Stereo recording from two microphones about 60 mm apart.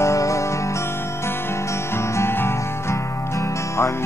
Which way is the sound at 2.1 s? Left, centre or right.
Left.